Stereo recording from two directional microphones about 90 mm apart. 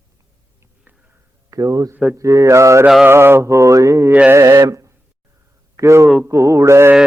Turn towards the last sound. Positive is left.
turn(degrees=-30)  # may be behind; listen again after turning